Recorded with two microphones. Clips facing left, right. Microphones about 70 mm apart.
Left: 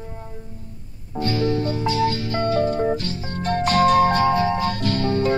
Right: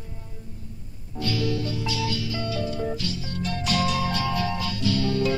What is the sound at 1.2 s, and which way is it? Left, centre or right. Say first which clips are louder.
Music: left 5 dB; left.